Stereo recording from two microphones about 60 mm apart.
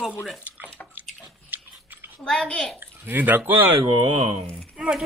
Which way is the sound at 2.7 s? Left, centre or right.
Right.